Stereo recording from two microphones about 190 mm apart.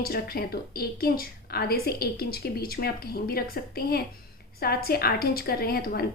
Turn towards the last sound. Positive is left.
turn(degrees=55)  # may be behind; listen again after turning